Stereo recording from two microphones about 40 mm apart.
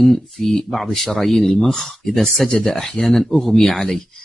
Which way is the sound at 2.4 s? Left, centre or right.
Centre.